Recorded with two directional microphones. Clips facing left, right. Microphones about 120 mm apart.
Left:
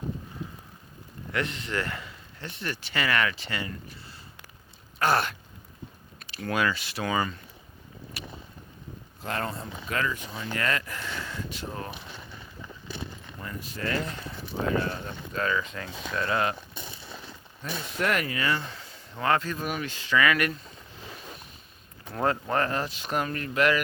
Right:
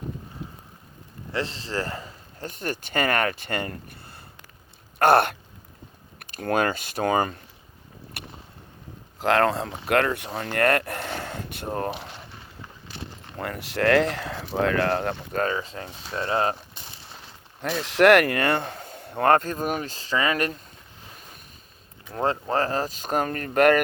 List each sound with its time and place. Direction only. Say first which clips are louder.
1.3 s speech: right 1 dB; 30° right (ahead or behind); by 4.2 s 55° right (ahead or behind)
4.9 s a sound: right 7 dB; 55° right (ahead or behind)
6.1 s speech: right 5 dB; 50° right (ahead or behind)
8.1 s boat: even; 55° right (ahead or behind)
9.1 s speech: right 12 dB; 90° right; by 11.9 s 50° right (ahead or behind)
13.3 s speech: right 13 dB; 70° right (ahead or behind)
15.3 s speech: left 1 dB; 40° right (ahead or behind)
17.6 s speech: right 11 dB; 80° right; by 20.6 s 35° right (ahead or behind)
22.1 s speech: right 2 dB; 30° right (ahead or behind); by 23.8 s 50° right (ahead or behind)